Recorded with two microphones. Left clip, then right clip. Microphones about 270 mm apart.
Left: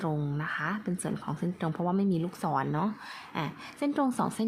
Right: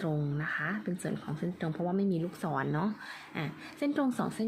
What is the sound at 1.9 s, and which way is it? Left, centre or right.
Speech, centre.